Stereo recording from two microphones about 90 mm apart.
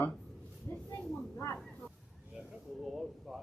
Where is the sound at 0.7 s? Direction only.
30° left (ahead or behind).